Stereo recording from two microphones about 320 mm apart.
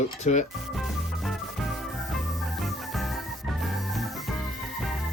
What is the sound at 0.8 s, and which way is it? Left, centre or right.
Music, centre.